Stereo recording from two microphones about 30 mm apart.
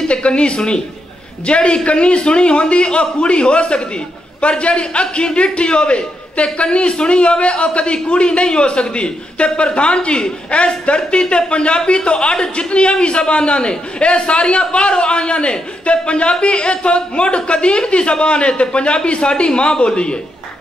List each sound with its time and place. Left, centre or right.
0.1 s a man's voice: left